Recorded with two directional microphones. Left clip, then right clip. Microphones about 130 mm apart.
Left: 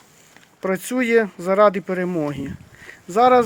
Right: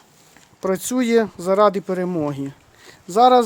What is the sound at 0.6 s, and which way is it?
Speech, 30° right (ahead or behind).